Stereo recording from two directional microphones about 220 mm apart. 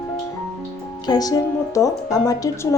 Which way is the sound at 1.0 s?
20° left (ahead or behind).